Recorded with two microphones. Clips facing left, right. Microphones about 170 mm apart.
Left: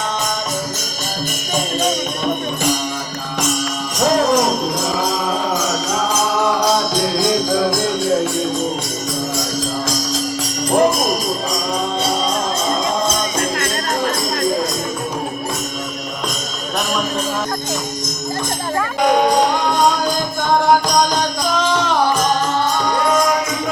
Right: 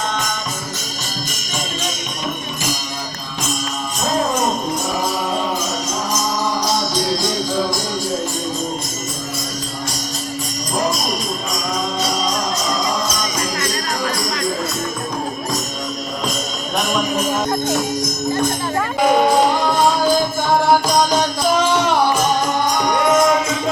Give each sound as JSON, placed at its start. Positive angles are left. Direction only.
{"t": 3.9, "sound": "jingle bell", "side_deg": 90}
{"t": 5.5, "sound": "music", "side_deg": 70}
{"t": 7.0, "sound": "music", "side_deg": 50}
{"t": 10.4, "sound": "music", "side_deg": 65}
{"t": 19.0, "sound": "music", "side_deg": -5}
{"t": 22.8, "sound": "music", "side_deg": -20}